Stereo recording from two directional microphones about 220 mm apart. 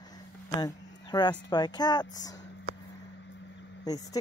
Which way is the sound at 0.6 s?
20° left (ahead or behind).